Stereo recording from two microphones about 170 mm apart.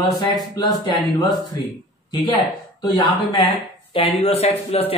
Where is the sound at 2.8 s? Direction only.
25° left (ahead or behind).